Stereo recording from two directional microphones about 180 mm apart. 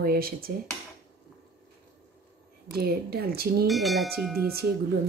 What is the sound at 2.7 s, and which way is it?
A woman's voice, 60° right (ahead or behind).